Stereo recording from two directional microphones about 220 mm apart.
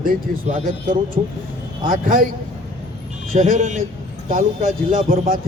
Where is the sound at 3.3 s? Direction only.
35° right (ahead or behind).